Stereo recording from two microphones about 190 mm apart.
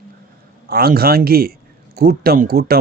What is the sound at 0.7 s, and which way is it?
A man's voice, 55° right (ahead or behind).